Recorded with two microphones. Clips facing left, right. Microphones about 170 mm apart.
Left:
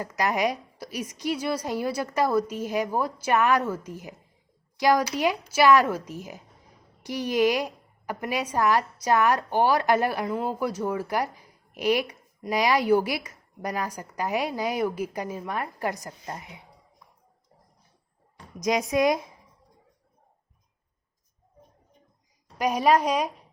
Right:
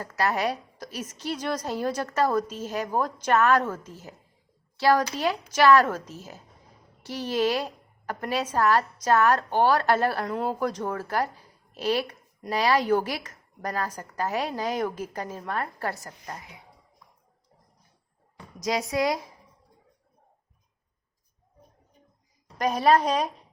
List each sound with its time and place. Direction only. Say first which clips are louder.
0.0 s a woman's voice: left 1 dB; 15° left (ahead or behind)
18.6 s speech: left 3 dB; 20° left (ahead or behind)
22.5 s a woman's voice: even; 10° left (ahead or behind)